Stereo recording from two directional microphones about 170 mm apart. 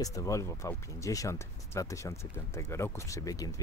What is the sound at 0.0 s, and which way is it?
Speech, 20° left (ahead or behind).